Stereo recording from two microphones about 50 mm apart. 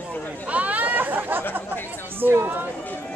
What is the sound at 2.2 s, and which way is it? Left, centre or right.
Speech, right.